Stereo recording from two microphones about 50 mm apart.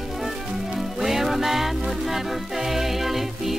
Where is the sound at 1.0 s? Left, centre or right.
Centre.